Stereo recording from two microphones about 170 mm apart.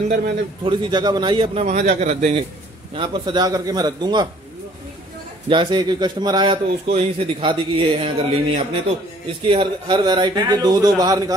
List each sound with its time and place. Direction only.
0.7 s speech: 25° right (ahead or behind)
1.6 s a man's voice: 45° right (ahead or behind)
3.0 s speech: 25° right (ahead or behind)
5.5 s speech: 30° right (ahead or behind)